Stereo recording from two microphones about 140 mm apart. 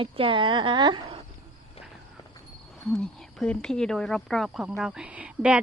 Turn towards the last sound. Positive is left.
turn(degrees=-10)  # may be behind; listen again after turning